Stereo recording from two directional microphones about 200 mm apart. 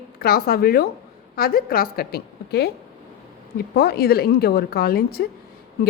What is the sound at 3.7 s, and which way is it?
A woman's voice, 50° left (ahead or behind).